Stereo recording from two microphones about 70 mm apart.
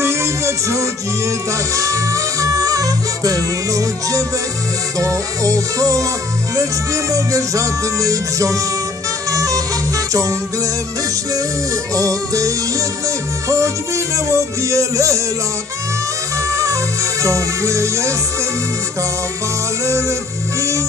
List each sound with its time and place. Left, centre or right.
0.0 s music: right
11.9 s music: right
16.4 s music: right